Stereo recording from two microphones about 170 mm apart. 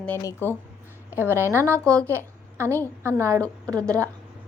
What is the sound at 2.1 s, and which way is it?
A woman's voice, 15° right (ahead or behind).